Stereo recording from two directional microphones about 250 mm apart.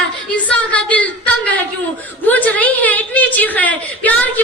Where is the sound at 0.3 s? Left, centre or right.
Centre.